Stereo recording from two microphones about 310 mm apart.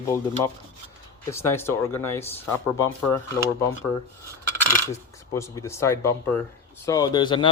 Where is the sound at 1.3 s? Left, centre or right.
Centre.